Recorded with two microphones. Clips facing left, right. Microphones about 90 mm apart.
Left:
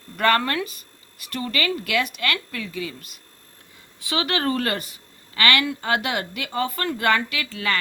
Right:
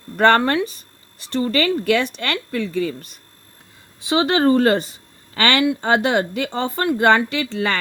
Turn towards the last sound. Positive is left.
turn(degrees=-30)  # may be behind; listen again after turning